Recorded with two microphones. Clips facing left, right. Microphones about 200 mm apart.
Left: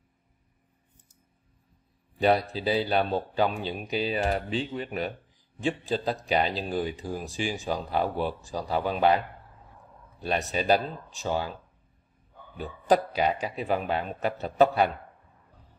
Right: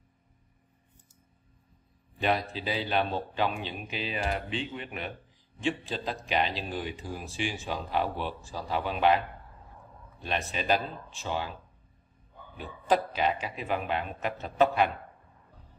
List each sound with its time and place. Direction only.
2.1 s speech: 35° left (ahead or behind)
10.2 s speech: 40° left (ahead or behind)
12.5 s speech: 40° left (ahead or behind)